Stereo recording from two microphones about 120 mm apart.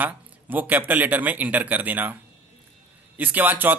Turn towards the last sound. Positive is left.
turn(degrees=-15)  # may be behind; listen again after turning